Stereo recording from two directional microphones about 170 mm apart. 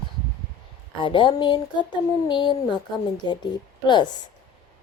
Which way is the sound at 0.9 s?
30° left (ahead or behind).